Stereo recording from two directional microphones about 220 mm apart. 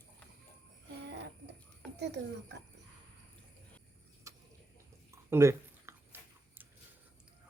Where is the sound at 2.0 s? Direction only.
50° right (ahead or behind).